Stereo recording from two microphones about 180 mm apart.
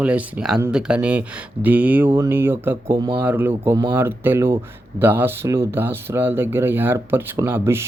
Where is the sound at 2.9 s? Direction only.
25° right (ahead or behind).